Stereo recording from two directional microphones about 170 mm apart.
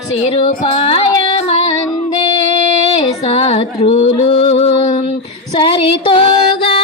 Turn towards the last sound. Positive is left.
turn(degrees=30)  # may be behind; listen again after turning